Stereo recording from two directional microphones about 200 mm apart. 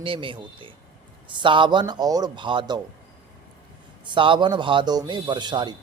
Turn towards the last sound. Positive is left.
turn(degrees=-20)  # may be behind; listen again after turning